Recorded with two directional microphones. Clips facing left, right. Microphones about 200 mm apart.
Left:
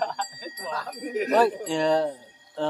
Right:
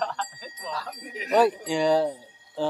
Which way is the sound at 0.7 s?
50° left (ahead or behind).